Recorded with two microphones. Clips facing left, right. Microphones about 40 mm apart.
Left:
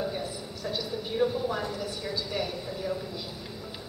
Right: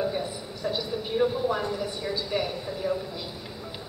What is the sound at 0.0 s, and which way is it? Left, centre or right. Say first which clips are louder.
Speech: right 4 dB; centre.